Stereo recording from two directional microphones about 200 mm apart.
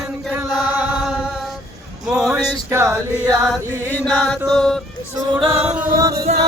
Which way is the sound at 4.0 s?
5° left (ahead or behind).